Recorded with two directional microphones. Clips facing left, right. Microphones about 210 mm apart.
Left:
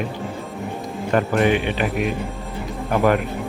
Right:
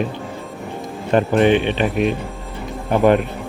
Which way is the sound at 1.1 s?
20° right (ahead or behind).